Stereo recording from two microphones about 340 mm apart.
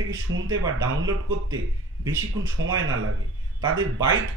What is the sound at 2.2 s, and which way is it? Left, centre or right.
Speech, right.